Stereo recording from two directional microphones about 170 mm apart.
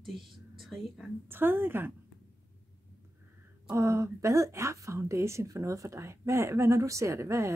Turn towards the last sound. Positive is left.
turn(degrees=-15)  # may be behind; listen again after turning